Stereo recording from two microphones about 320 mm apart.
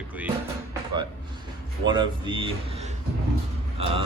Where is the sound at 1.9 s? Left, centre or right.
Centre.